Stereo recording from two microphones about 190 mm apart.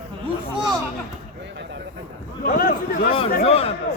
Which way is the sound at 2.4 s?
50° left (ahead or behind).